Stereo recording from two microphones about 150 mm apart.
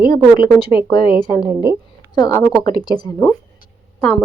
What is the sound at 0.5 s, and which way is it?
Speech, 30° left (ahead or behind).